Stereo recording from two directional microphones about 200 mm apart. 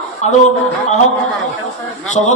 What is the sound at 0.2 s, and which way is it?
Speech, 35° left (ahead or behind).